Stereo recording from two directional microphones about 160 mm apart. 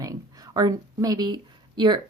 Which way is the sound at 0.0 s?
20° right (ahead or behind).